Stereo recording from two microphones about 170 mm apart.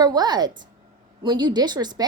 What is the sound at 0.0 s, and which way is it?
A woman's voice, 25° right (ahead or behind).